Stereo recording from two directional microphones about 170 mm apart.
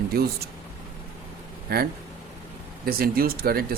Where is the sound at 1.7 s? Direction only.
65° right (ahead or behind).